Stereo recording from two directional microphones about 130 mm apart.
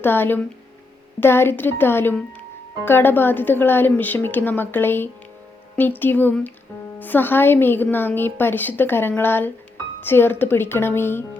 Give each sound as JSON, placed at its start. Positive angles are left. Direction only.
{"t": 0.0, "sound": "a woman's voice", "side_deg": 15}